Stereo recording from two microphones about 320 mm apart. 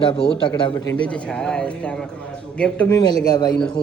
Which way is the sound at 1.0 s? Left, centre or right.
Centre.